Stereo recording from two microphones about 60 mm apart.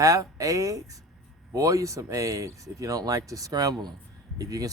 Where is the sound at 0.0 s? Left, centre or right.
Right.